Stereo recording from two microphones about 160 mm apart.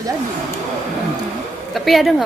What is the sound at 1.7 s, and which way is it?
Speech, centre (ahead or behind).